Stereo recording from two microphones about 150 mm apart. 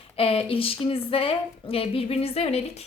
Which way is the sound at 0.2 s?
40° left (ahead or behind).